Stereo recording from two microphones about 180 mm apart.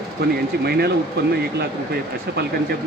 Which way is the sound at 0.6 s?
65° right (ahead or behind).